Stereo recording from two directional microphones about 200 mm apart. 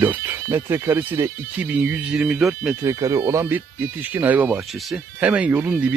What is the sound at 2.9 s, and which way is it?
Speech, 15° right (ahead or behind).